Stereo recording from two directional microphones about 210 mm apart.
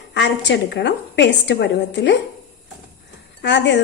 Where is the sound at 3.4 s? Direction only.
60° left (ahead or behind).